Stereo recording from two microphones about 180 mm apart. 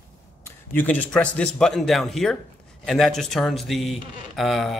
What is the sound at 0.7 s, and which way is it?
Speech, 10° left (ahead or behind).